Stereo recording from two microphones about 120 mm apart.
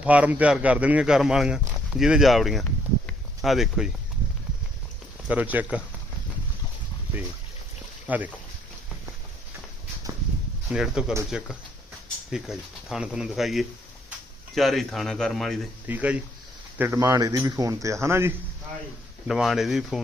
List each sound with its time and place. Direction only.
0.0 s speech: 10° right (ahead or behind)
5.3 s speech: 15° right (ahead or behind)
8.0 s speech: 15° right (ahead or behind)
10.7 s speech: 5° right (ahead or behind)
15.9 s speech: 10° right (ahead or behind)
17.0 s speech: 30° right (ahead or behind)
19.3 s speech: 5° right (ahead or behind)